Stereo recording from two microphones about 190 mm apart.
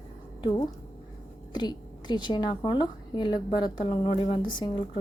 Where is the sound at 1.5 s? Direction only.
20° left (ahead or behind).